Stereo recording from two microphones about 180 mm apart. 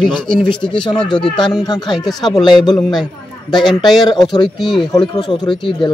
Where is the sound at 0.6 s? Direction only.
30° left (ahead or behind).